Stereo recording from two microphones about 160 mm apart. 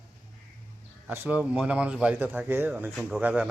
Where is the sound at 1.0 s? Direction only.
10° right (ahead or behind).